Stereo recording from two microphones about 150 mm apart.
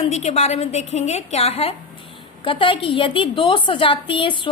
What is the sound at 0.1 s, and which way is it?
A woman's voice, 45° left (ahead or behind).